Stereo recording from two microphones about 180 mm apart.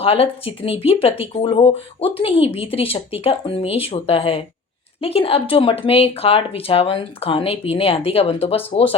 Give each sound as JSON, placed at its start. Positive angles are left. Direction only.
{"t": 0.0, "sound": "speech", "side_deg": 30}